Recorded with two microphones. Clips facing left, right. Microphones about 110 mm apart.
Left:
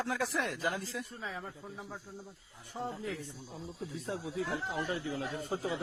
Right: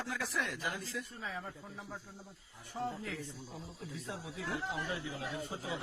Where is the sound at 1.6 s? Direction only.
15° left (ahead or behind).